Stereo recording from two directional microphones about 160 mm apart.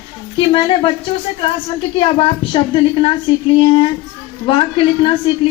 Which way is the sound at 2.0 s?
35° left (ahead or behind).